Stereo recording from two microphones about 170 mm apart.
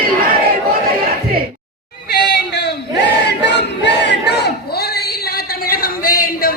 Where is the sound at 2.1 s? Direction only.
90° left.